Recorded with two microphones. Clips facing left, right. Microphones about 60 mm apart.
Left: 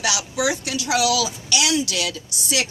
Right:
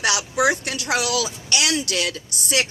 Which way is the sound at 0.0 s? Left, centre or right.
Right.